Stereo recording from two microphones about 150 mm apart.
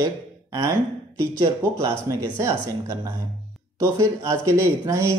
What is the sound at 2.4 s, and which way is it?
Speech, 20° right (ahead or behind).